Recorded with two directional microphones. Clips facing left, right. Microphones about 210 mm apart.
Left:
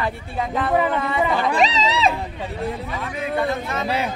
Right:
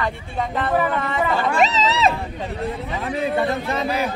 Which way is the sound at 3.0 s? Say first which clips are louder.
Right 4 dB; 35° right (ahead or behind).